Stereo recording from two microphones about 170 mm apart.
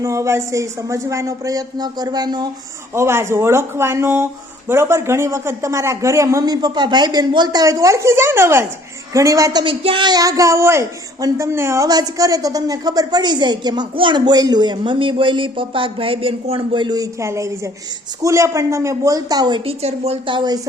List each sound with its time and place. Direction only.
0.0 s speech: 20° right (ahead or behind)